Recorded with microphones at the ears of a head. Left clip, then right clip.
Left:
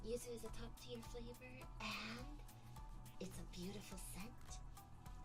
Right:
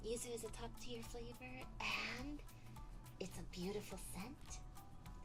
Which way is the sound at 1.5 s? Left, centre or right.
Right.